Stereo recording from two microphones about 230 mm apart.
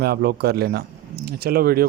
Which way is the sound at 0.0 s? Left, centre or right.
Right.